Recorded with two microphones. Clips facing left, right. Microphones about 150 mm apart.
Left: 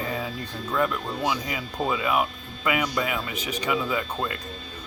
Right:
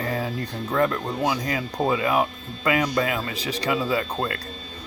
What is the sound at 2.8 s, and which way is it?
Speech, 40° right (ahead or behind).